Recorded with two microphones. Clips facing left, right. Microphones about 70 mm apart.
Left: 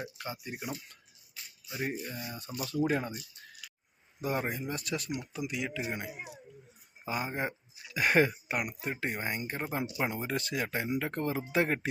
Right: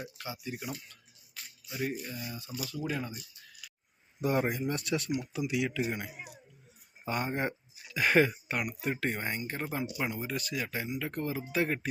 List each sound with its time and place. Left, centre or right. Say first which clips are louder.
0.3 s speech: right 3 dB; left
1.6 s speech: even; left
3.1 s a sound: left 3 dB; left
4.2 s speech: right 4 dB; centre
9.4 s speech: even; left